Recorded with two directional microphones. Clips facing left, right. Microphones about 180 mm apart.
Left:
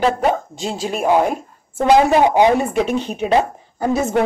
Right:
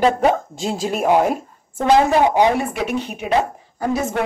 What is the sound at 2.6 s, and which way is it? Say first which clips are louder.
Speech: left 4 dB; 30° left (ahead or behind).